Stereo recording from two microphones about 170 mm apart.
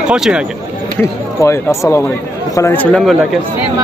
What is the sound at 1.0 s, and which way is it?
Speech, 15° left (ahead or behind).